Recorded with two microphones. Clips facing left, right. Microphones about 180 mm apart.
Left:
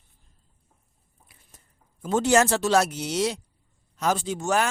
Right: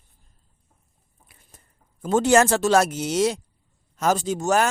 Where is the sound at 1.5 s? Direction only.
55° right (ahead or behind).